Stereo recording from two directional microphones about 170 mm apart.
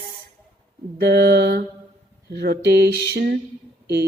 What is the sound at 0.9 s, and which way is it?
Speech, 80° right.